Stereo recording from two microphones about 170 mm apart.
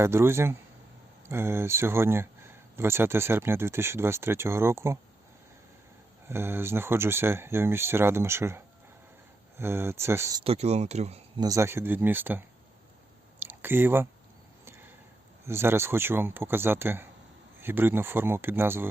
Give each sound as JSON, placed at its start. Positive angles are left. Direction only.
{"t": 0.0, "sound": "speech", "side_deg": -15}
{"t": 6.2, "sound": "speech", "side_deg": -15}
{"t": 10.4, "sound": "speech", "side_deg": -35}
{"t": 11.3, "sound": "speech", "side_deg": -20}
{"t": 14.6, "sound": "chop", "side_deg": -15}
{"t": 15.4, "sound": "speech", "side_deg": -15}